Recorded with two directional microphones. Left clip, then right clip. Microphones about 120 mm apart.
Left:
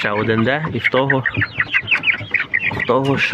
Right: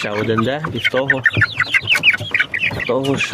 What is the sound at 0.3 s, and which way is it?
Speech, 20° right (ahead or behind).